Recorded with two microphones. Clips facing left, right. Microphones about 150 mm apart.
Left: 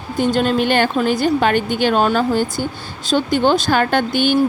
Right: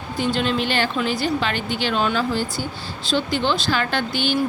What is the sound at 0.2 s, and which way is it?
Speech, 45° left (ahead or behind).